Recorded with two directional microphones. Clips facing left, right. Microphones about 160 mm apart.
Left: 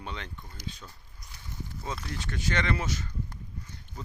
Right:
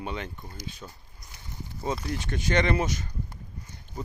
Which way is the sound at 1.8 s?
15° right (ahead or behind).